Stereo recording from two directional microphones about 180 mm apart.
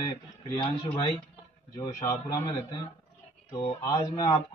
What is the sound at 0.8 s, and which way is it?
Speech, 30° left (ahead or behind).